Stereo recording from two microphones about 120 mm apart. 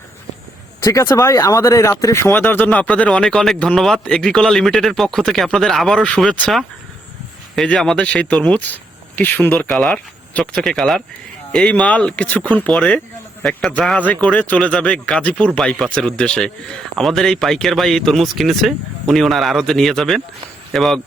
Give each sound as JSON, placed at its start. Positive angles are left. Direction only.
{"t": 0.8, "sound": "speech", "side_deg": 30}
{"t": 9.6, "sound": "speech", "side_deg": 5}